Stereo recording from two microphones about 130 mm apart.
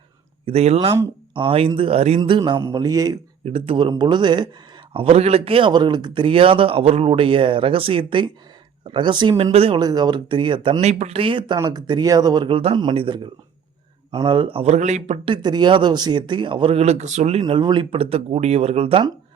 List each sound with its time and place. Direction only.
0.4 s speech: 55° right (ahead or behind)
2.7 s a man's voice: 30° right (ahead or behind)
3.4 s speech: 45° right (ahead or behind)
4.9 s speech: 50° right (ahead or behind)
9.4 s speech: 45° right (ahead or behind)
9.7 s speech: 30° right (ahead or behind)
10.8 s speech: 55° right (ahead or behind); by 12.5 s 30° right (ahead or behind)
12.5 s speech: 45° right (ahead or behind)
14.3 s speech: 40° right (ahead or behind); by 15.2 s 60° right (ahead or behind)
15.2 s speech: 35° right (ahead or behind); by 17.4 s 55° right (ahead or behind)
17.4 s speech: 35° right (ahead or behind)